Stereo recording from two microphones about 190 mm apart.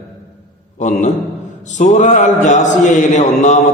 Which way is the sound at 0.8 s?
40° left (ahead or behind).